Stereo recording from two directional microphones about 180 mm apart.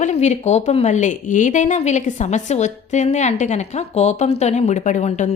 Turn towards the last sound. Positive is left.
turn(degrees=40)  # may be behind; listen again after turning